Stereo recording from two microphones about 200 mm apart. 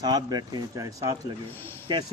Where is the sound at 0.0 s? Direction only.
20° right (ahead or behind).